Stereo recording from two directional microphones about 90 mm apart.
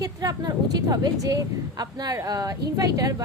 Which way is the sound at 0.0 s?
40° right (ahead or behind).